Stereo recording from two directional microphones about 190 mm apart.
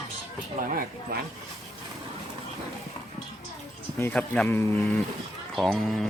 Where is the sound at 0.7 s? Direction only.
55° right (ahead or behind).